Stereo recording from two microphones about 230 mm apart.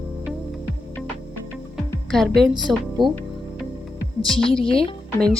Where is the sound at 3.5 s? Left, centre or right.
Centre.